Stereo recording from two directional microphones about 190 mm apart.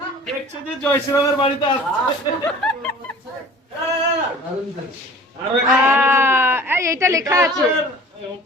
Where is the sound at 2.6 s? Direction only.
Centre (ahead or behind).